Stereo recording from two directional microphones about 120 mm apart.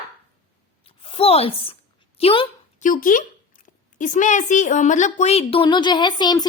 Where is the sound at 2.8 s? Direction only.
90° left.